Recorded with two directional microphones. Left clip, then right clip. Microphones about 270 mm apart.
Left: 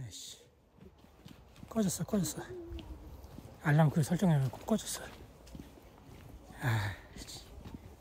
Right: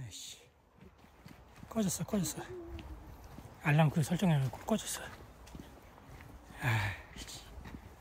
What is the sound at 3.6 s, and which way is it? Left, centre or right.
Speech, centre.